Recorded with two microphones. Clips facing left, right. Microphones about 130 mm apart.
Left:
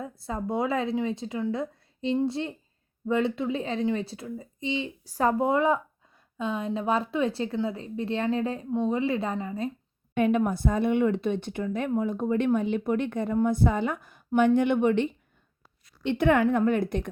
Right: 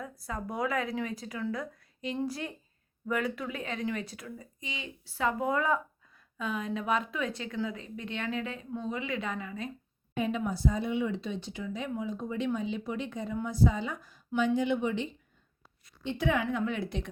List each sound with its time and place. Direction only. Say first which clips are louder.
0.0 s speech: left 5 dB; 25° left (ahead or behind)
5.0 s a woman's voice: left 6 dB; 40° left (ahead or behind)
5.5 s a woman's voice: left 5 dB; 25° left (ahead or behind)
10.2 s a woman's voice: left 7 dB; 60° left (ahead or behind)